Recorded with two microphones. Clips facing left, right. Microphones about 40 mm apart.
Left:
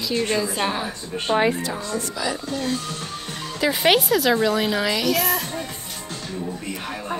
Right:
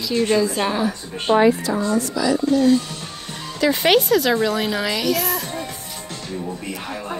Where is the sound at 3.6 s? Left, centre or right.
Centre.